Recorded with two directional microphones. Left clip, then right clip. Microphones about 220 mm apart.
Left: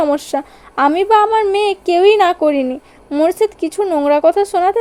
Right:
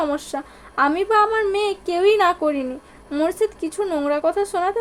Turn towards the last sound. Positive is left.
turn(degrees=25)  # may be behind; listen again after turning